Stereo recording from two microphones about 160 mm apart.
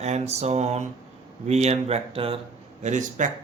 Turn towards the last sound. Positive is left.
turn(degrees=-50)  # may be behind; listen again after turning